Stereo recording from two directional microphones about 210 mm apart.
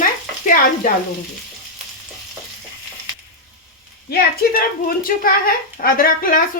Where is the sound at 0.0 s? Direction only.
40° left (ahead or behind).